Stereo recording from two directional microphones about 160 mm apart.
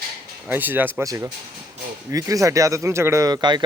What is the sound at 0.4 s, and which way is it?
Speech, 10° right (ahead or behind).